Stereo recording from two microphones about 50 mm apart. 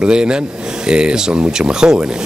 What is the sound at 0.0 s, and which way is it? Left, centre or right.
Speech, centre.